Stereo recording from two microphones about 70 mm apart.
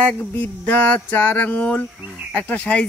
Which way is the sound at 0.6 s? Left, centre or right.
Left.